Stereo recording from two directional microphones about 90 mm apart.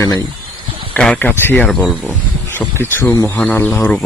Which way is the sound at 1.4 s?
20° left (ahead or behind).